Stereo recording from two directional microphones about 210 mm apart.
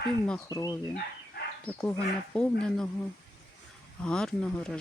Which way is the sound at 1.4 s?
50° left (ahead or behind).